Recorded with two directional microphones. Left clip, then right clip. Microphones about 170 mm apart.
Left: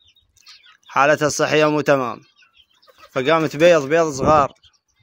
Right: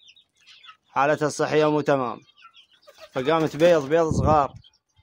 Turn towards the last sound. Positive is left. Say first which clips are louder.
# left 5 dB
turn(degrees=15)  # may be behind; listen again after turning